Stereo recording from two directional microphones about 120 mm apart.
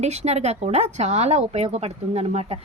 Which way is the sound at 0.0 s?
65° right (ahead or behind).